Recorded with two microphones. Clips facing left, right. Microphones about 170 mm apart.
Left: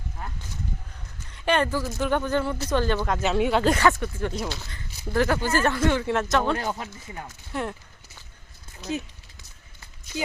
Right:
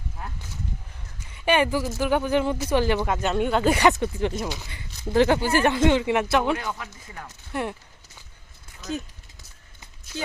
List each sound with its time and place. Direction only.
0.2 s a sound: 5° right (ahead or behind)
1.2 s speech: 5° right (ahead or behind)
3.2 s speech: 5° left (ahead or behind)
3.8 s speech: 20° right (ahead or behind)
6.6 s speech: 35° left (ahead or behind)
7.5 s speech: 5° right (ahead or behind)